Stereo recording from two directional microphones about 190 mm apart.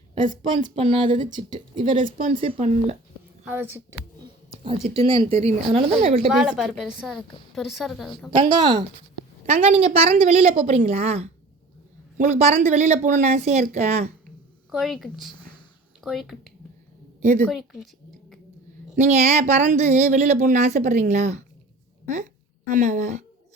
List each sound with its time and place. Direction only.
0.8 s speech: 25° right (ahead or behind)
2.0 s speech: 45° right (ahead or behind)
3.4 s speech: 10° right (ahead or behind)
4.9 s speech: 30° right (ahead or behind)
6.3 s a woman's voice: 5° right (ahead or behind)
8.4 s speech: 25° right (ahead or behind)
14.7 s a woman's voice: centre (ahead or behind)
17.4 s a woman's voice: centre (ahead or behind)
18.9 s a woman's voice: 35° right (ahead or behind)